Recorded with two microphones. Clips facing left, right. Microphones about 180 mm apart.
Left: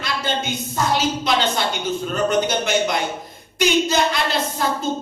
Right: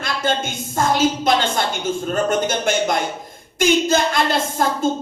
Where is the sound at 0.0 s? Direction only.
50° right (ahead or behind).